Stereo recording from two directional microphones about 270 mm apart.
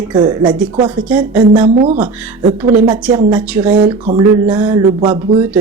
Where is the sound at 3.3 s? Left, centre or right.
Centre.